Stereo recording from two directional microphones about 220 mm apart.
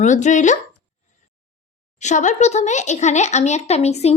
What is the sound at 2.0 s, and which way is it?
A woman's voice, 35° left (ahead or behind).